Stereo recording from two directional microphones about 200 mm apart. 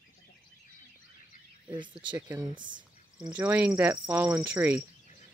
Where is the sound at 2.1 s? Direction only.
10° right (ahead or behind).